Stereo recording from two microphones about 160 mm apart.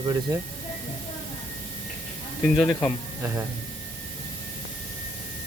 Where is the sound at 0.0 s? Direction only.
20° right (ahead or behind).